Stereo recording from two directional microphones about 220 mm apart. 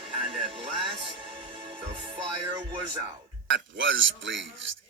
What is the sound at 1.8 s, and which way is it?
Speech, 25° right (ahead or behind).